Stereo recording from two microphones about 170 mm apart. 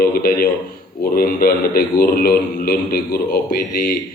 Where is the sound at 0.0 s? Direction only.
60° left (ahead or behind).